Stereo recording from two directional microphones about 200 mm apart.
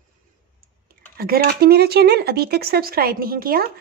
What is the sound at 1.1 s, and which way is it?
Speech, 50° right (ahead or behind).